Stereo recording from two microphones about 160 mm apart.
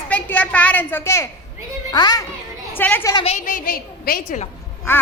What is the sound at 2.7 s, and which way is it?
Speech, 10° left (ahead or behind).